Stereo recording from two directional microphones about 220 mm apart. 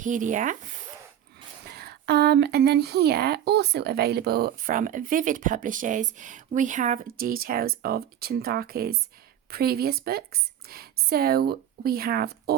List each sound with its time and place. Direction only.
0.0 s speech: 35° right (ahead or behind)
1.6 s speech: 45° right (ahead or behind)